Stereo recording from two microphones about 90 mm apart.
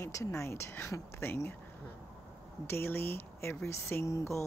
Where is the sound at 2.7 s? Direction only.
25° left (ahead or behind).